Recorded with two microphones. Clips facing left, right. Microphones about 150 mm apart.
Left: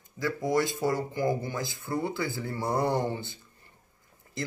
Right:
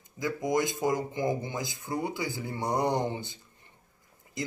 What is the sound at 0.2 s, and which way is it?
Speech, 15° right (ahead or behind).